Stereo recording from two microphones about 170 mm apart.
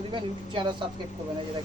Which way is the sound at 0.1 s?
30° right (ahead or behind).